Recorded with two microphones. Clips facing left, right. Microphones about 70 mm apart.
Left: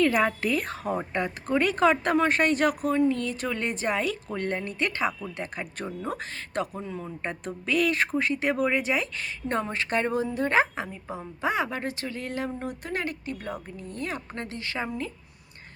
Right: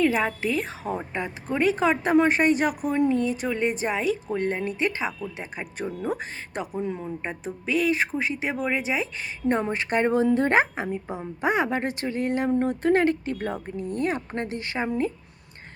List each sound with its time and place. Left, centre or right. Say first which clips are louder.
0.1 s a woman's voice: even; centre
9.1 s speech: right 4 dB; centre; by 13.7 s right
13.7 s speech: right 7 dB; right